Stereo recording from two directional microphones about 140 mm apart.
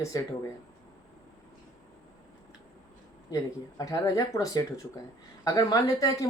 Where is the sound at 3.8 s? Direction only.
25° left (ahead or behind).